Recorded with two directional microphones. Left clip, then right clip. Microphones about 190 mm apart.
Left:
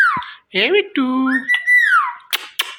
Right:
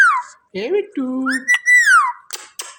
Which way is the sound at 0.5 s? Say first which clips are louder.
Left 5 dB; 10° right (ahead or behind).